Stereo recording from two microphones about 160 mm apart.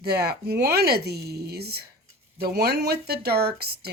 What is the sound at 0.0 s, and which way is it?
Speech, 85° right.